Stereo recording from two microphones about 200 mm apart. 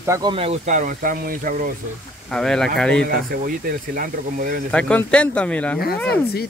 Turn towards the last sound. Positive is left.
turn(degrees=50)  # may be behind; listen again after turning